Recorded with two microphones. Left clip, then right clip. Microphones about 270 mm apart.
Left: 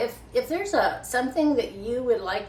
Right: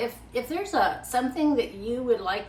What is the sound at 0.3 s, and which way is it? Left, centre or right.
A woman's voice, centre.